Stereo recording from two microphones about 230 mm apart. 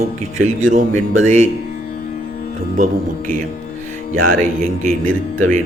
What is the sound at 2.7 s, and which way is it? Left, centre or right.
Speech, right.